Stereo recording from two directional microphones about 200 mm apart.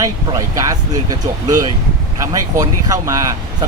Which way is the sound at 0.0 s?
15° right (ahead or behind).